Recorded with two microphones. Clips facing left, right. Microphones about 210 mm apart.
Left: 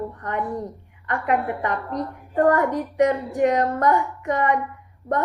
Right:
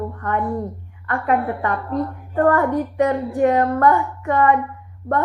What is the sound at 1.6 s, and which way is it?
A woman's voice, 20° left (ahead or behind).